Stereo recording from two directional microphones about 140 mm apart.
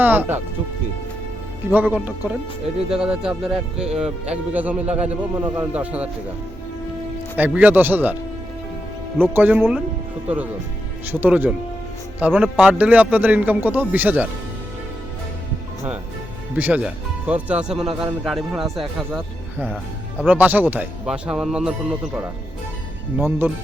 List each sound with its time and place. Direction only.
0.0 s speech: 15° right (ahead or behind)
1.7 s speech: 10° right (ahead or behind)
7.3 s speech: 10° right (ahead or behind)
16.6 s speech: 10° right (ahead or behind)
20.2 s speech: 10° right (ahead or behind)
23.1 s speech: 15° right (ahead or behind)